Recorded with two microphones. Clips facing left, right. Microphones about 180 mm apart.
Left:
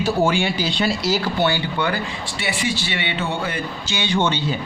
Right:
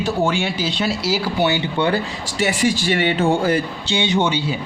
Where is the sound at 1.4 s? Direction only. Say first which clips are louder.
Right 3 dB; 20° right (ahead or behind).